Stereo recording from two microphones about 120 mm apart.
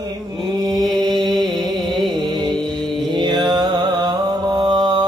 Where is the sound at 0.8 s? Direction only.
Centre (ahead or behind).